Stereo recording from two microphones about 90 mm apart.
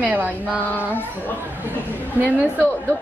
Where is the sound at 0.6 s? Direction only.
20° left (ahead or behind).